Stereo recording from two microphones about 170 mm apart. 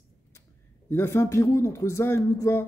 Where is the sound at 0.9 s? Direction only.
15° left (ahead or behind).